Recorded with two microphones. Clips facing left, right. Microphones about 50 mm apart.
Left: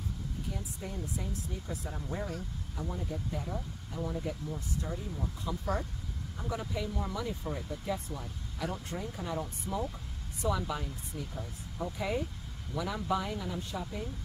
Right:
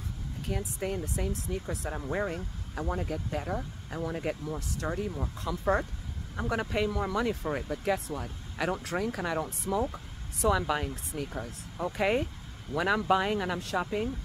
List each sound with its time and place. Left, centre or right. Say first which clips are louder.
0.5 s speech: right 12 dB; right
2.1 s speech: right 6 dB; right
2.9 s speech: right 6 dB; right